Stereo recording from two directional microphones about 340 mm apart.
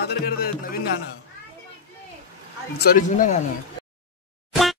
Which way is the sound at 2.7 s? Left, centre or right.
Left.